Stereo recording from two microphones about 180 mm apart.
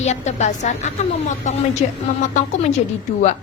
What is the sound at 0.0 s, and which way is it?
A woman's voice, 40° left (ahead or behind).